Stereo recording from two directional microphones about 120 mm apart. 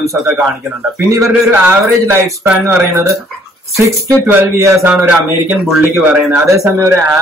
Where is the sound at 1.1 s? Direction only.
20° right (ahead or behind).